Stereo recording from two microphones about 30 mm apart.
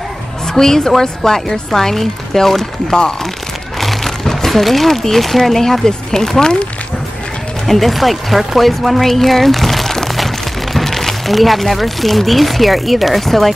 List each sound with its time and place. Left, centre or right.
0.5 s speech: centre
2.9 s speech: left
3.8 s crumpling: centre
5.0 s speech: centre
7.6 s speech: centre